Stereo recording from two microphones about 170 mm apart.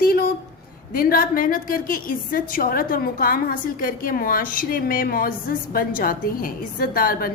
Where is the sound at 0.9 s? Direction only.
60° left (ahead or behind).